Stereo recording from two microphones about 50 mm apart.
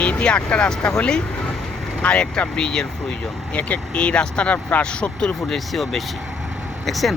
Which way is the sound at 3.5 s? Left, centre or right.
Left.